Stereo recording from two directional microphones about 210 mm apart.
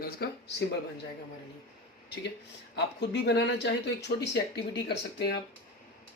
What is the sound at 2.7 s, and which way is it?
Speech, 55° left (ahead or behind).